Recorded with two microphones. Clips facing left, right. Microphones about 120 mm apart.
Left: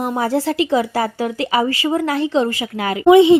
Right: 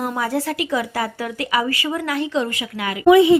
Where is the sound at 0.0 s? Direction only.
25° left (ahead or behind).